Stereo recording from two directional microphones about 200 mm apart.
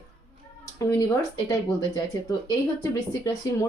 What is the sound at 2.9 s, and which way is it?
Speech, 15° left (ahead or behind).